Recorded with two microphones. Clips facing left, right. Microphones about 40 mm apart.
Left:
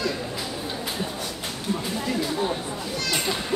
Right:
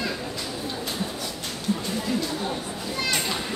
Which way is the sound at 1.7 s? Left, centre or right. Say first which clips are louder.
Right 1 dB; left.